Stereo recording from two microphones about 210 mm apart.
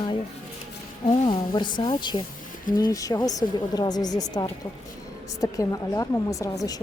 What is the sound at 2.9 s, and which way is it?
A woman's voice, 15° left (ahead or behind).